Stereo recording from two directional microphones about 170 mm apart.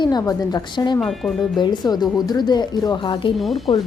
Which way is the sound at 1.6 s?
25° left (ahead or behind).